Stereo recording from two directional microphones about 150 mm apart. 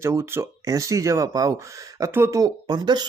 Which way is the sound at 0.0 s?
15° right (ahead or behind).